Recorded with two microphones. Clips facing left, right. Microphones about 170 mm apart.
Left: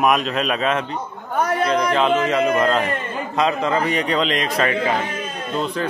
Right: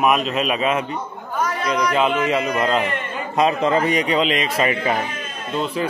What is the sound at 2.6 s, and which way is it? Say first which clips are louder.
Speech: left 1 dB; 5° right (ahead or behind).